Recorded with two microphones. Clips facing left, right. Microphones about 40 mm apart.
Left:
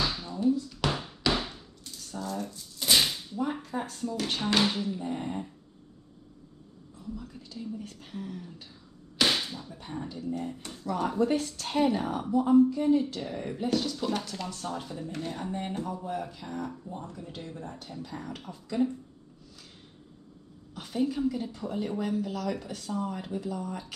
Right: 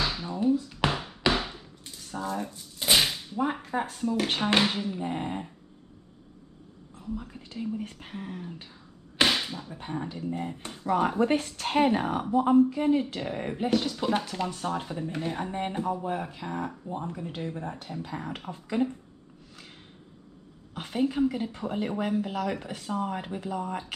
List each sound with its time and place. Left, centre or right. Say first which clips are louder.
0.0 s a sound: right 1 dB; right
3.8 s speech: right 4 dB; right
7.0 s speech: right 4 dB; right
9.3 s speech: right 2 dB; right
20.7 s speech: right 2 dB; right